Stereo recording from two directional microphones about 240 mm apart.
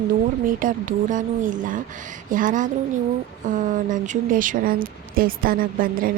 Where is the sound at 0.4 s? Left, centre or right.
Right.